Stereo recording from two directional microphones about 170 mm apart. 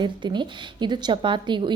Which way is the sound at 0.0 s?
25° right (ahead or behind).